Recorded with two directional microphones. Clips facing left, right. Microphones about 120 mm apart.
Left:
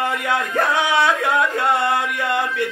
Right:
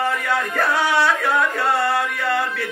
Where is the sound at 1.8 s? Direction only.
20° left (ahead or behind).